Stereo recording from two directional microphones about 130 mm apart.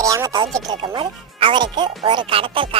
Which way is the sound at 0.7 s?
40° right (ahead or behind).